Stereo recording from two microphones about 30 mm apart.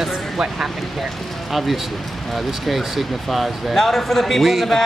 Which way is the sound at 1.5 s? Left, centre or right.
Centre.